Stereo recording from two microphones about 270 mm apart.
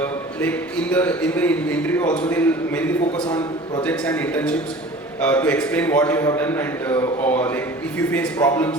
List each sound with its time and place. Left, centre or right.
0.0 s a man's voice: centre
3.2 s a man's voice: centre
3.8 s a man's voice: centre